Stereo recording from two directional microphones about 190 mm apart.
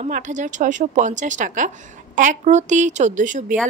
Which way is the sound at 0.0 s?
40° right (ahead or behind).